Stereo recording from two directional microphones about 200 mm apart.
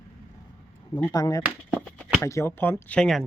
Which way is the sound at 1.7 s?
5° left (ahead or behind).